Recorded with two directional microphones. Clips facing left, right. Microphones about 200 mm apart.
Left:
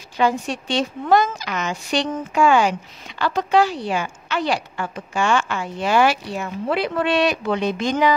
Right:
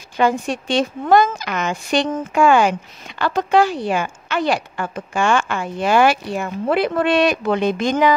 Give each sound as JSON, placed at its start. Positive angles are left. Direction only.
{"t": 0.2, "sound": "a woman's voice", "side_deg": -50}